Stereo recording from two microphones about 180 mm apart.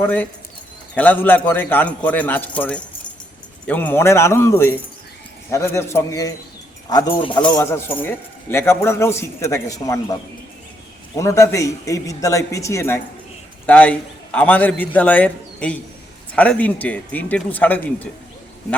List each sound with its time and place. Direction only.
0.0 s a man's voice: 10° left (ahead or behind); by 7.4 s 25° left (ahead or behind)
7.5 s a man's voice: 15° left (ahead or behind)
11.2 s a man's voice: 15° left (ahead or behind)